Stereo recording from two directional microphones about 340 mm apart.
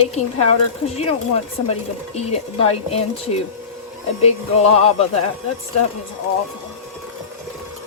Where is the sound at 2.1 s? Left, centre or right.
Centre.